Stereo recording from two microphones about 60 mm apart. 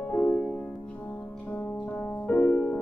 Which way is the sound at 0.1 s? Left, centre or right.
Left.